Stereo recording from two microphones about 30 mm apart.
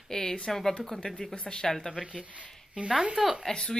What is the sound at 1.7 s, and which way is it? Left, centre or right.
Speech, centre.